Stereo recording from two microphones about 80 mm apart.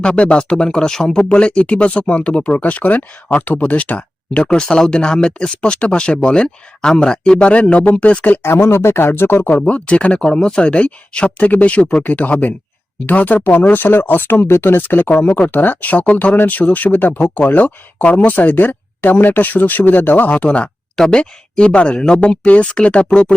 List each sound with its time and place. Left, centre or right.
0.0 s speech: centre